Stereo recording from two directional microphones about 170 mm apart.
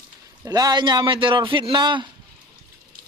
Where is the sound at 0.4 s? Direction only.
20° right (ahead or behind).